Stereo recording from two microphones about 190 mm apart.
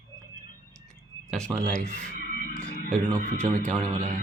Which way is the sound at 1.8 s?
40° right (ahead or behind).